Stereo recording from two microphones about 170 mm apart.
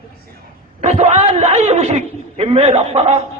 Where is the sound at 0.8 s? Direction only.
40° right (ahead or behind).